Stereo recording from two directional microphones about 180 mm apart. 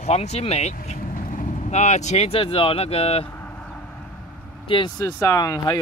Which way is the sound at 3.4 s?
5° left (ahead or behind).